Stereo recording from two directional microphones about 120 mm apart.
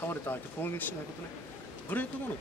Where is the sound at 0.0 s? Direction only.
15° left (ahead or behind).